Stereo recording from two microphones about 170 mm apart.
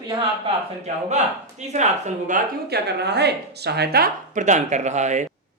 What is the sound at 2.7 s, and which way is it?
Speech, 80° right.